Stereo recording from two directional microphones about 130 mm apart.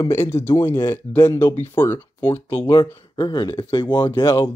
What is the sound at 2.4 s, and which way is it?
Speech, 45° left (ahead or behind).